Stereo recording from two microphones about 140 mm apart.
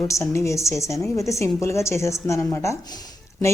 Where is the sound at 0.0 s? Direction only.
20° left (ahead or behind).